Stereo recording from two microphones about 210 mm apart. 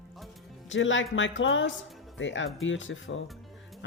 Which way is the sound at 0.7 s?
65° left (ahead or behind).